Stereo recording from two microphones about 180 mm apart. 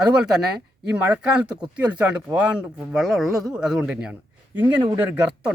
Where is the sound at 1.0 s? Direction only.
5° right (ahead or behind).